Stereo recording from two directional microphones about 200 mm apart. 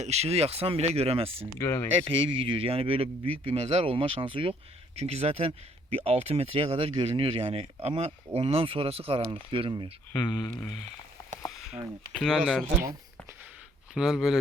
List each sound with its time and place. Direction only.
0.0 s speech: 30° right (ahead or behind)
1.6 s speech: 15° left (ahead or behind)
2.0 s speech: 25° right (ahead or behind)
10.1 s speech: 15° left (ahead or behind)
12.1 s speech: 5° left (ahead or behind)
13.9 s speech: centre (ahead or behind)